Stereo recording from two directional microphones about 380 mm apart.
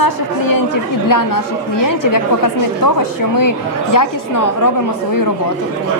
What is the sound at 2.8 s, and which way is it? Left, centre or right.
A woman's voice, left.